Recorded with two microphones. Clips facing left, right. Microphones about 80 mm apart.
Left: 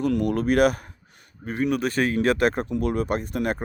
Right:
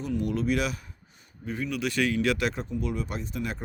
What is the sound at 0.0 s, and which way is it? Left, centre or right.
Speech, left.